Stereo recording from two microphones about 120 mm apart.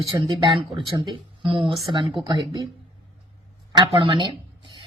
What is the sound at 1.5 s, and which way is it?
Speech, 50° right (ahead or behind).